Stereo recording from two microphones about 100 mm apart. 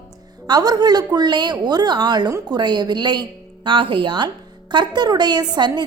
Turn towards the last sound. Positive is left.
turn(degrees=-45)  # may be behind; listen again after turning